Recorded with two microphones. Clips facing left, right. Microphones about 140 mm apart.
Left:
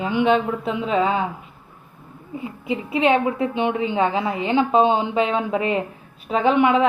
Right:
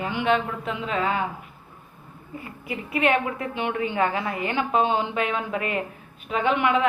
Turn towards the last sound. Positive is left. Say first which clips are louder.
# left 5 dB
turn(degrees=30)  # may be behind; listen again after turning